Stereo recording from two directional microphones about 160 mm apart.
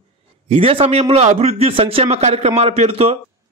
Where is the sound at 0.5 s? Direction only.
35° right (ahead or behind).